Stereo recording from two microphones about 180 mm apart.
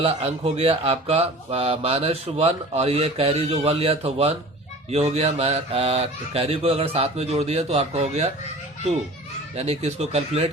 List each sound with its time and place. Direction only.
0.0 s speech: 35° right (ahead or behind)
9.6 s speech: 35° right (ahead or behind)